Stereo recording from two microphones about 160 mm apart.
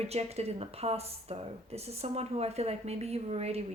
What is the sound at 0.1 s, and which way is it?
A woman's voice, 40° right (ahead or behind).